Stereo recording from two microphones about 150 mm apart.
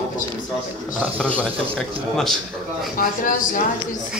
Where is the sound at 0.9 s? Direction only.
10° right (ahead or behind).